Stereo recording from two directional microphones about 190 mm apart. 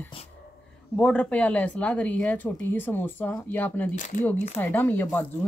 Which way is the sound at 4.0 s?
40° left (ahead or behind).